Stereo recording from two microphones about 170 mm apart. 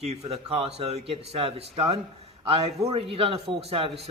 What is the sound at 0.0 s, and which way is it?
A man's voice, 40° right (ahead or behind).